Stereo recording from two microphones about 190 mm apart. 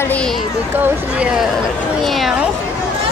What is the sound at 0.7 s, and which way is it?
Speech, 10° right (ahead or behind).